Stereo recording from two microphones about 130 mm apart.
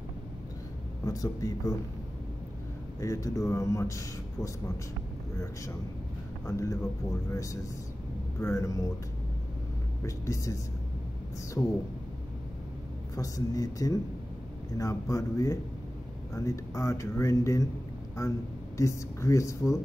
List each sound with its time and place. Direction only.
1.0 s speech: 25° left (ahead or behind)
3.0 s speech: 25° left (ahead or behind)
6.4 s speech: 25° left (ahead or behind)
10.0 s speech: 25° left (ahead or behind)
11.6 s speech: 15° left (ahead or behind)
13.1 s speech: 25° left (ahead or behind)